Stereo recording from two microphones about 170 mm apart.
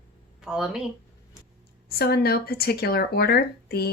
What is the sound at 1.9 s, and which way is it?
Speech, 65° left (ahead or behind).